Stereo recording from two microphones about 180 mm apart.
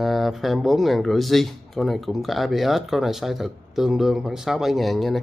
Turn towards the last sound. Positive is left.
turn(degrees=0)  # may be behind; listen again after turning